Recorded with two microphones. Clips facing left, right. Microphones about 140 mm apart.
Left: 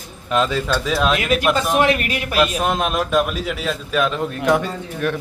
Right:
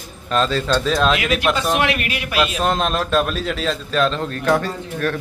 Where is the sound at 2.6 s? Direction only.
10° left (ahead or behind).